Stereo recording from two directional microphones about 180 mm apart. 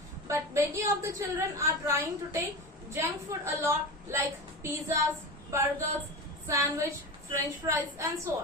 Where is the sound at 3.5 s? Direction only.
15° right (ahead or behind).